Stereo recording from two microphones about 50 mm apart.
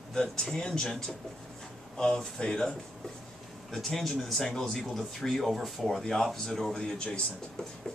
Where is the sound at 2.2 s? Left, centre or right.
Centre.